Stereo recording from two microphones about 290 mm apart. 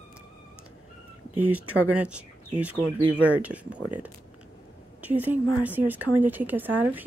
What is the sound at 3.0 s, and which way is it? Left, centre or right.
Speech, right.